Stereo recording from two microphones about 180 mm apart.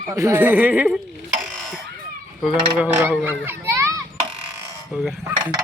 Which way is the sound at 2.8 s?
10° right (ahead or behind).